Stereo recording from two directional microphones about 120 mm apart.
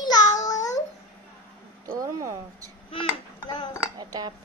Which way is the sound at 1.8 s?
25° right (ahead or behind).